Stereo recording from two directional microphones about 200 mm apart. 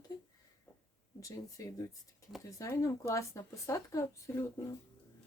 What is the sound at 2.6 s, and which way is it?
Speech, 15° left (ahead or behind).